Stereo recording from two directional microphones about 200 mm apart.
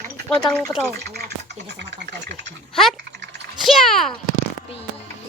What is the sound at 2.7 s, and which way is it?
A child's voice, centre (ahead or behind).